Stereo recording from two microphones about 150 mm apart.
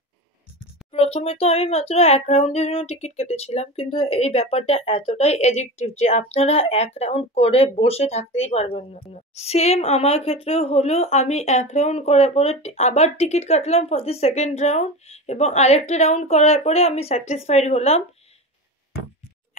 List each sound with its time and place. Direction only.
0.9 s speech: 40° left (ahead or behind)